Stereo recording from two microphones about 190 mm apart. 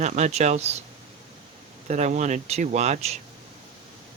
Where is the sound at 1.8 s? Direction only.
40° right (ahead or behind).